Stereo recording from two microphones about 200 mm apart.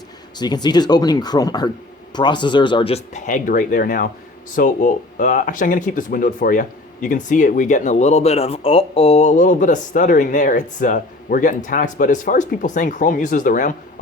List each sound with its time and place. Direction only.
0.3 s speech: 20° left (ahead or behind); by 13.7 s 40° left (ahead or behind)